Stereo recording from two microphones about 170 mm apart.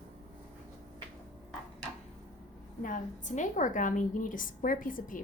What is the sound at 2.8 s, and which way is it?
A woman's voice, 50° left (ahead or behind).